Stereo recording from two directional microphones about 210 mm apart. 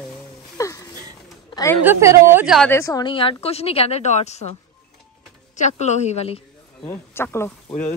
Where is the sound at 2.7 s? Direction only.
15° left (ahead or behind); by 4.6 s 30° left (ahead or behind).